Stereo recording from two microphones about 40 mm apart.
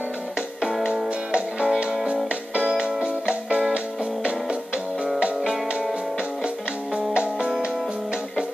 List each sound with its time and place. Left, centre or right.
0.6 s music: centre
2.8 s music: right
7.2 s music: right